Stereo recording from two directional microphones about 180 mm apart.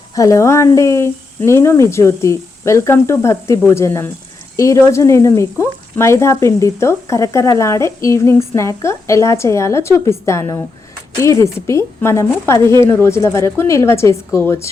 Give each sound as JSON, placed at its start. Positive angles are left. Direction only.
{"t": 0.2, "sound": "speech", "side_deg": 15}